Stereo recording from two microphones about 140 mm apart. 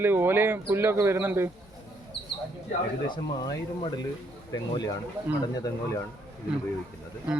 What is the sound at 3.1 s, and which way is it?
Speech, 35° left (ahead or behind).